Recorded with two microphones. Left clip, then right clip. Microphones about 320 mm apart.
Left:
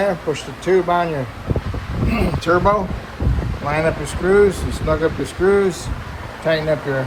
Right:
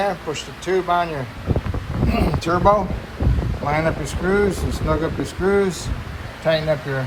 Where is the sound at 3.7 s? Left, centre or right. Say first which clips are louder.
Left 2 dB; centre.